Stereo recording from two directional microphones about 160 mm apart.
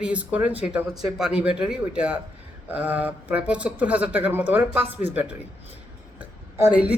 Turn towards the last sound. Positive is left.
turn(degrees=-10)  # may be behind; listen again after turning